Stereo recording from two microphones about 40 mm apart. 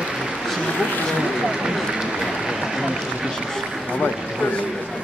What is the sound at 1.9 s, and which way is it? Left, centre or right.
Run, centre.